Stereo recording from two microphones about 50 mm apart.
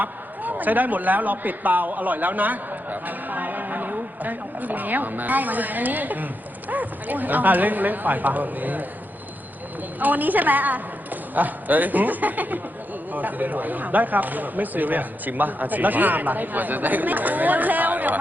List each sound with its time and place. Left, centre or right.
0.0 s a man's voice: right
10.0 s speech: right